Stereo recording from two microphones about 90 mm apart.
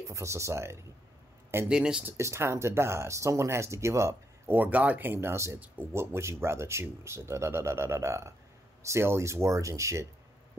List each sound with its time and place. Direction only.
0.1 s speech: 35° right (ahead or behind)
1.7 s speech: 10° right (ahead or behind)
2.0 s speech: 30° right (ahead or behind)